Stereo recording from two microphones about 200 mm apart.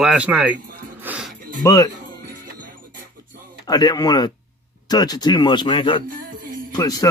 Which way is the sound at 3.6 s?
20° left (ahead or behind).